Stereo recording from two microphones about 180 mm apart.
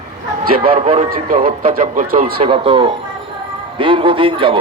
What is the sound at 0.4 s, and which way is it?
Speech, 55° right (ahead or behind).